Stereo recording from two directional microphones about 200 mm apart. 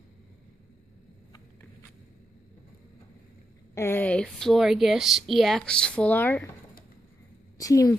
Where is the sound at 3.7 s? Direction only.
10° left (ahead or behind).